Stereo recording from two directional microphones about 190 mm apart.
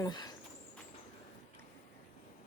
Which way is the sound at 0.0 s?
20° left (ahead or behind).